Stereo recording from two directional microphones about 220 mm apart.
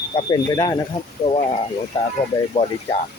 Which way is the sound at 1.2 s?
30° left (ahead or behind).